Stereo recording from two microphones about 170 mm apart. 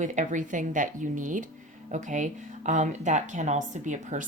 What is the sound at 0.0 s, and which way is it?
Speech, 45° right (ahead or behind).